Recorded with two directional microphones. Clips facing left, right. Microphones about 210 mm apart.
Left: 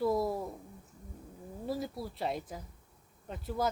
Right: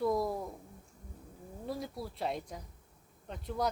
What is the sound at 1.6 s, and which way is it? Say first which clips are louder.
Speech: left 3 dB; centre (ahead or behind).